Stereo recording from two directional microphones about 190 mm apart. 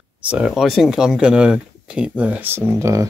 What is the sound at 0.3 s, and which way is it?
Speech, centre (ahead or behind).